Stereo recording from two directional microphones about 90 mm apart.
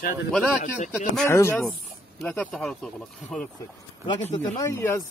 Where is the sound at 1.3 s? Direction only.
30° left (ahead or behind).